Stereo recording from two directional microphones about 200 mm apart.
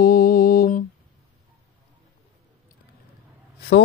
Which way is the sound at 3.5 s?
55° left (ahead or behind).